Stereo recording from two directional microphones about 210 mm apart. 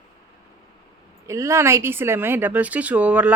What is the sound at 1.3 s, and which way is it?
Speech, 15° right (ahead or behind).